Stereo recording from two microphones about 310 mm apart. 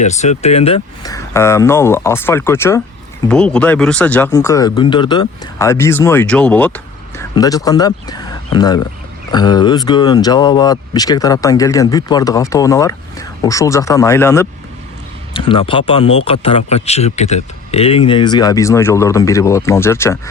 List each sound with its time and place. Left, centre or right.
0.0 s speech: left